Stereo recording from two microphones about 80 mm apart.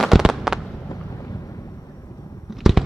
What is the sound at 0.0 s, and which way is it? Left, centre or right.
Fireworks, centre.